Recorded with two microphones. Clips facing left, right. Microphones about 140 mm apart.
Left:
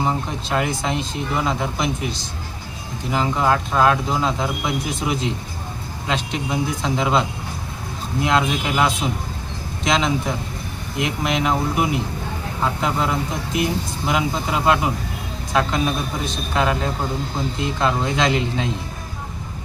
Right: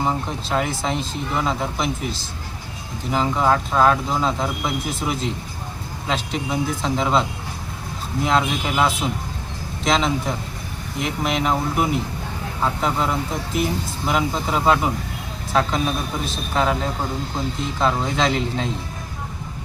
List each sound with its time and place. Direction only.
0.0 s speech: centre (ahead or behind)